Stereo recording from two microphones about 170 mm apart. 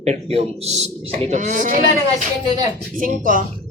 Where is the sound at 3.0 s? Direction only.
55° right (ahead or behind).